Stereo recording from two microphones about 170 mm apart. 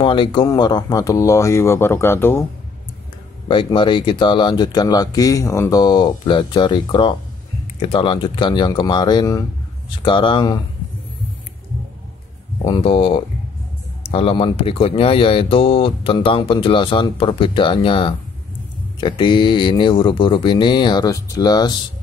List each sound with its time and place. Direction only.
0.0 s speech: 30° left (ahead or behind); by 2.4 s 15° left (ahead or behind)
3.4 s speech: 30° left (ahead or behind)
12.6 s speech: 30° left (ahead or behind)